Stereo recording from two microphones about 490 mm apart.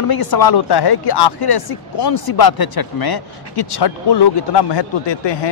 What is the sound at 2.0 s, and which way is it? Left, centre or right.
Speech, left.